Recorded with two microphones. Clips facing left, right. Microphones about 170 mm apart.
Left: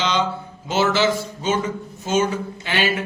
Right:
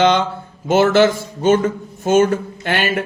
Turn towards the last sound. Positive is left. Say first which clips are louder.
# right 3 dB
turn(degrees=-55)  # may be behind; listen again after turning